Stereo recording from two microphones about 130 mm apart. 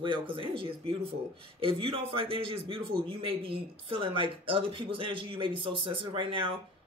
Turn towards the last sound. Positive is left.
turn(degrees=-40)  # may be behind; listen again after turning